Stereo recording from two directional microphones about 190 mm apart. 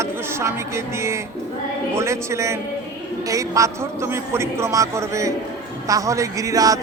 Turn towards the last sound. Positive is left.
turn(degrees=-20)  # may be behind; listen again after turning